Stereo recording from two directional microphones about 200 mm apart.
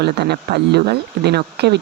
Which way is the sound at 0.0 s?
55° right (ahead or behind).